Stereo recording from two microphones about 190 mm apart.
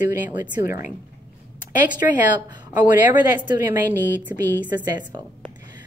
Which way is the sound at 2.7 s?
10° right (ahead or behind).